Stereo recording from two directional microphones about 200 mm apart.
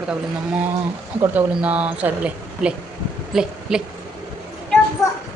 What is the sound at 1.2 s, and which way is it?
Speech, 5° right (ahead or behind).